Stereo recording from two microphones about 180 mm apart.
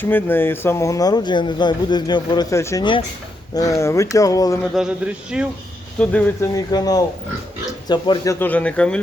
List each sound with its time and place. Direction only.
0.0 s speech: 10° left (ahead or behind)
4.6 s speech: centre (ahead or behind)
6.0 s speech: 10° left (ahead or behind)